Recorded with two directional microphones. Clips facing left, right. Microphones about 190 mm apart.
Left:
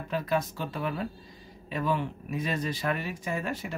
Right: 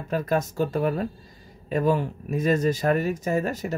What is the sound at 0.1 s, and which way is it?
Speech, 45° right (ahead or behind).